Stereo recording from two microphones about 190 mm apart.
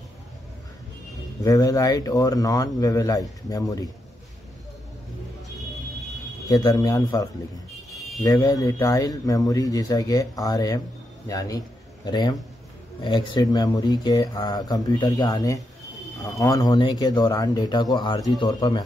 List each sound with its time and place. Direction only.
1.4 s speech: 20° left (ahead or behind)
6.5 s a man's voice: 20° left (ahead or behind)